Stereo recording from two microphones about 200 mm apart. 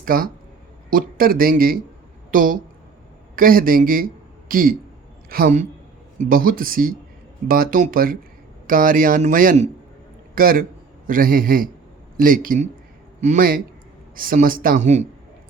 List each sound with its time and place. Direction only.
0.0 s a man's voice: 45° right (ahead or behind)